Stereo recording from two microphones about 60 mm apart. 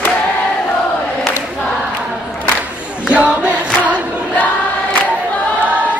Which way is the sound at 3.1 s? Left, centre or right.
Right.